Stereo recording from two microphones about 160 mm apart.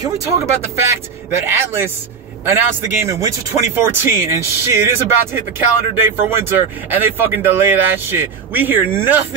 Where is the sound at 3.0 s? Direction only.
20° right (ahead or behind).